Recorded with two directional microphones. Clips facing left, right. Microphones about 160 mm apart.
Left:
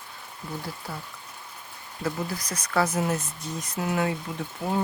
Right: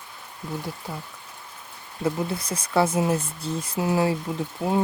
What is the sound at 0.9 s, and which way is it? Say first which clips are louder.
Speech: right 1 dB; 20° right (ahead or behind).